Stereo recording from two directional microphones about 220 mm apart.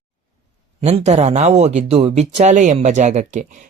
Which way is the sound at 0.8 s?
30° right (ahead or behind).